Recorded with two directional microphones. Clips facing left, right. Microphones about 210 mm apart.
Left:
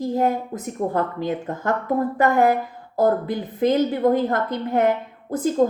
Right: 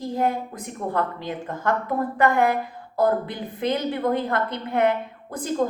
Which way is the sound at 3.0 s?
45° left (ahead or behind).